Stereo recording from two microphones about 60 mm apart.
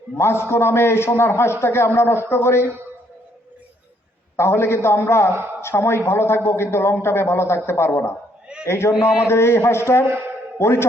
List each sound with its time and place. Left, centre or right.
0.2 s a man's voice: left
4.4 s a man's voice: left